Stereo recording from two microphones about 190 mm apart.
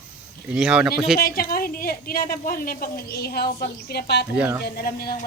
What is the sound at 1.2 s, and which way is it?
A woman's voice, 50° left (ahead or behind).